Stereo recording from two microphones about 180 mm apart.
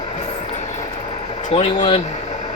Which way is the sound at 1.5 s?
30° left (ahead or behind).